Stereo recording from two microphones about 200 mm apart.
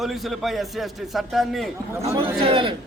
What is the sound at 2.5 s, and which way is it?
Speech, 25° right (ahead or behind).